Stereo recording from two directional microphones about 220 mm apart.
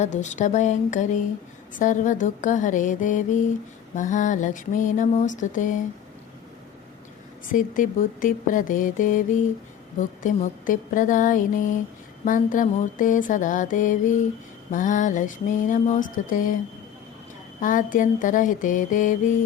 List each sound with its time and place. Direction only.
0.0 s mantra: 35° left (ahead or behind)
7.5 s mantra: 35° left (ahead or behind)
17.6 s mantra: 35° left (ahead or behind)